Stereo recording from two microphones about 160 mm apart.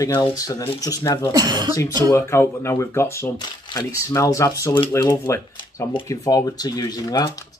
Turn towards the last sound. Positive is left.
turn(degrees=25)  # may be behind; listen again after turning